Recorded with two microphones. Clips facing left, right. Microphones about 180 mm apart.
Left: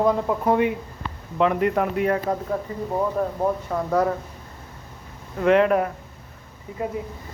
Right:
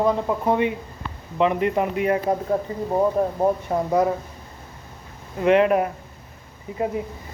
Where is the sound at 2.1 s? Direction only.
25° right (ahead or behind).